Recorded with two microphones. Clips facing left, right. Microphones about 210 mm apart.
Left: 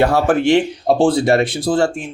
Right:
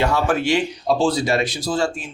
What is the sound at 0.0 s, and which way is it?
Speech, 60° left (ahead or behind).